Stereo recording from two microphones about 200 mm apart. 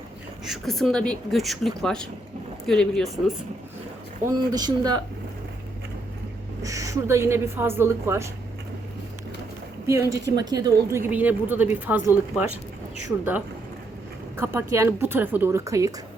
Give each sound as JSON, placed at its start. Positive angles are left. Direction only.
{"t": 0.4, "sound": "a woman's voice", "side_deg": 0}
{"t": 4.3, "sound": "speech", "side_deg": -20}
{"t": 6.6, "sound": "a woman's voice", "side_deg": -15}
{"t": 9.8, "sound": "a woman's voice", "side_deg": -15}
{"t": 14.3, "sound": "a woman's voice", "side_deg": -10}